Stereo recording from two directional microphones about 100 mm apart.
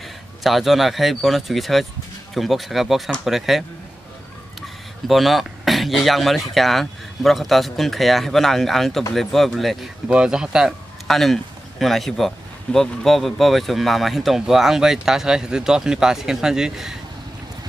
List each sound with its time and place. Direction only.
0.4 s speech: centre (ahead or behind)